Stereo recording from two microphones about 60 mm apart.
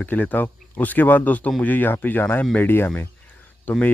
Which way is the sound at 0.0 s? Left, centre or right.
Left.